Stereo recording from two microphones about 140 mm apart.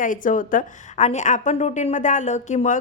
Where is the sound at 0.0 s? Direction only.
70° left (ahead or behind).